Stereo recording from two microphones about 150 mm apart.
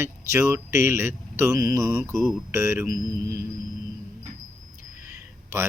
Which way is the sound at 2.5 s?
20° right (ahead or behind).